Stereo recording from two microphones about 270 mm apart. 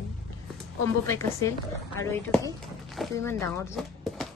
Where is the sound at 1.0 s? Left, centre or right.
Centre.